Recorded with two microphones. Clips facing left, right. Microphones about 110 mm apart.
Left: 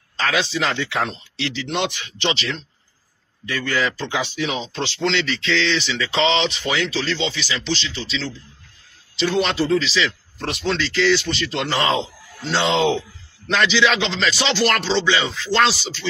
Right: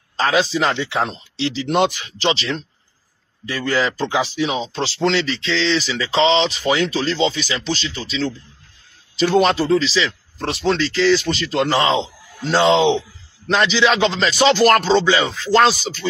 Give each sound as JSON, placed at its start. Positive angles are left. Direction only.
{"t": 0.2, "sound": "speech", "side_deg": -35}